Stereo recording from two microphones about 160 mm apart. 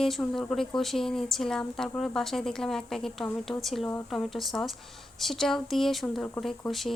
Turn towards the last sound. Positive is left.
turn(degrees=0)  # may be behind; listen again after turning